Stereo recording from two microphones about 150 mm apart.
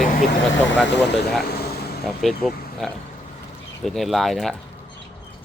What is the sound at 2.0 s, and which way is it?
Speech, centre (ahead or behind).